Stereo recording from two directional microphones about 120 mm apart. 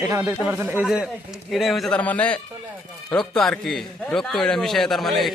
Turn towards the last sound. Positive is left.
turn(degrees=0)  # may be behind; listen again after turning